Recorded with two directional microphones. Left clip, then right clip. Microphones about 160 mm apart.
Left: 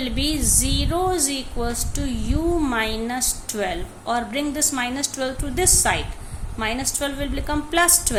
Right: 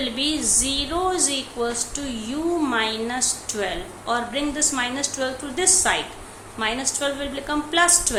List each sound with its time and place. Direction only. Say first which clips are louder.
0.0 s a woman's voice: right 1 dB; 40° left (ahead or behind)